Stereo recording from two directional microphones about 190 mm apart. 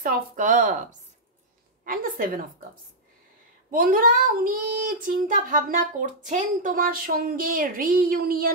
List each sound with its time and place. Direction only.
0.0 s child singing: 45° right (ahead or behind)
1.9 s child singing: 45° right (ahead or behind)
3.7 s child singing: 45° right (ahead or behind)